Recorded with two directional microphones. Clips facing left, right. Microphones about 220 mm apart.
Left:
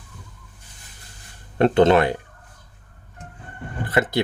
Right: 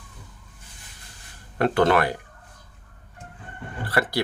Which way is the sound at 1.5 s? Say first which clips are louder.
Left 5 dB; 25° left (ahead or behind).